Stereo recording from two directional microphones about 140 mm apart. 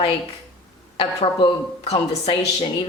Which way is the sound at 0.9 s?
35° left (ahead or behind).